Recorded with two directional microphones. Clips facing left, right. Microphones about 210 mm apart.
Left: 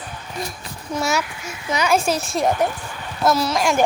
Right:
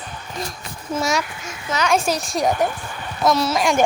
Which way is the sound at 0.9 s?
Centre (ahead or behind).